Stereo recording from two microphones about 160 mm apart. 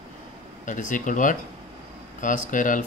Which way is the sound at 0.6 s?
55° left (ahead or behind).